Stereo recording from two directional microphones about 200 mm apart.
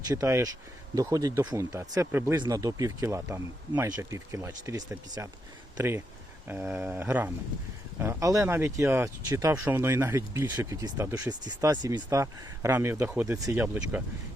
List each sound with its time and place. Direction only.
0.1 s speech: 15° right (ahead or behind)